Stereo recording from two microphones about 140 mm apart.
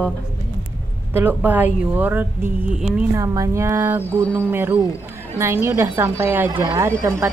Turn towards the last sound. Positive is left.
turn(degrees=-20)  # may be behind; listen again after turning